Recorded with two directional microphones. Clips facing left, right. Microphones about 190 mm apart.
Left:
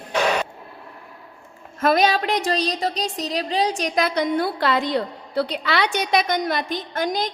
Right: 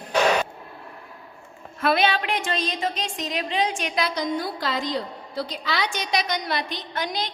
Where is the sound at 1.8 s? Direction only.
40° left (ahead or behind).